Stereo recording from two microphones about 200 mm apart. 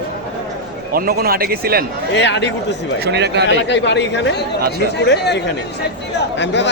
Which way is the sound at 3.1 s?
55° right (ahead or behind).